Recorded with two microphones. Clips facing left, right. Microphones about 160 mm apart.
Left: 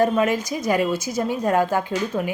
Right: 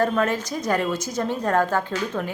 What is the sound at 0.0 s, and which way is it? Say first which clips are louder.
A woman's voice: left 3 dB; 10° left (ahead or behind).